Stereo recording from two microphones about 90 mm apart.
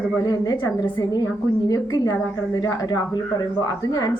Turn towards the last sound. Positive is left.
turn(degrees=45)  # may be behind; listen again after turning